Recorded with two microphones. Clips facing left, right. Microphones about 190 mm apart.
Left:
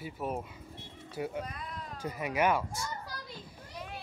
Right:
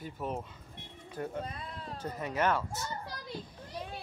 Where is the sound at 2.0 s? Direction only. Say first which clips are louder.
Left 2 dB; 10° left (ahead or behind).